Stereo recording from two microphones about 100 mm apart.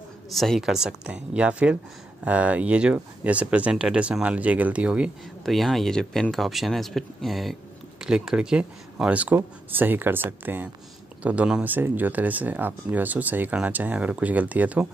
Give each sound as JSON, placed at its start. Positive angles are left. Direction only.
{"t": 0.3, "sound": "speech", "side_deg": 0}
{"t": 5.4, "sound": "speech", "side_deg": 0}